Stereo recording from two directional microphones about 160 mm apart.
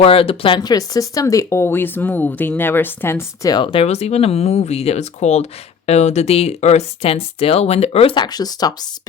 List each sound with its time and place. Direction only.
0.0 s speech: 35° left (ahead or behind); by 3.5 s 15° left (ahead or behind)
3.5 s speech: 30° left (ahead or behind)